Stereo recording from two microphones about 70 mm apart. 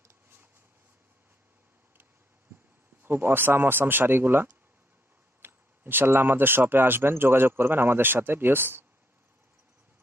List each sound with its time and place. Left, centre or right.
3.0 s speech: right